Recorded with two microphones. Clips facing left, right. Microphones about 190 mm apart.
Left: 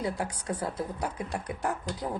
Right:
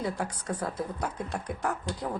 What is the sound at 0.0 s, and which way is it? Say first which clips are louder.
Speech: even; 10° left (ahead or behind).